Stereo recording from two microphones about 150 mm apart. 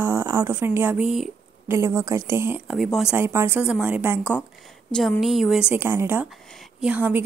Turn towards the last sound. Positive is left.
turn(degrees=-10)  # may be behind; listen again after turning